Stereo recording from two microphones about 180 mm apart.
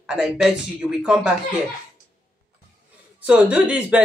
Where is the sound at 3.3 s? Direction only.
5° right (ahead or behind).